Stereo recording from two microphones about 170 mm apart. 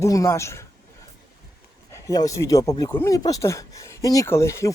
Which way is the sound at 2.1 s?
20° left (ahead or behind).